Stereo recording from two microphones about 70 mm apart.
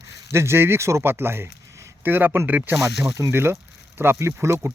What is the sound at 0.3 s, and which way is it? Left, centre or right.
Speech, right.